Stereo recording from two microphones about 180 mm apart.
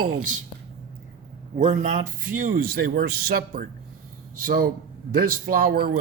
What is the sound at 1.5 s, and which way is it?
Speech, 40° right (ahead or behind).